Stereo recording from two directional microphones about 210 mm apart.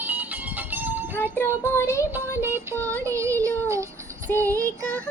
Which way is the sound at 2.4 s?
10° right (ahead or behind).